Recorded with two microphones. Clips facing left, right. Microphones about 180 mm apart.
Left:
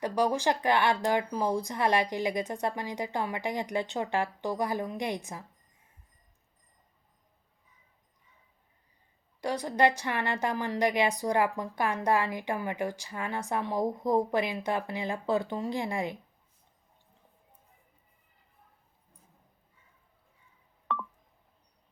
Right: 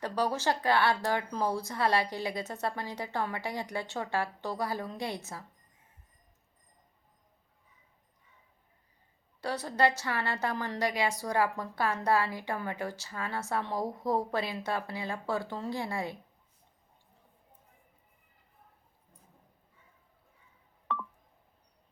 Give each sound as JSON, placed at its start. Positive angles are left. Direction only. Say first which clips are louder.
{"t": 0.0, "sound": "a woman's voice", "louder": "left 3 dB", "side_deg": 15}
{"t": 9.4, "sound": "a woman's voice", "louder": "left 2 dB", "side_deg": 15}